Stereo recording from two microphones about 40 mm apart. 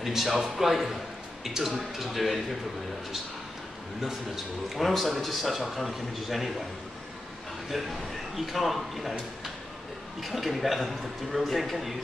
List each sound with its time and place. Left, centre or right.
0.1 s a man's voice: centre
4.7 s a man's voice: centre
7.7 s a man's voice: centre
10.2 s a man's voice: centre